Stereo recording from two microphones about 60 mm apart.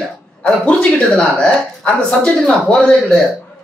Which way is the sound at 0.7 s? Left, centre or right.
Centre.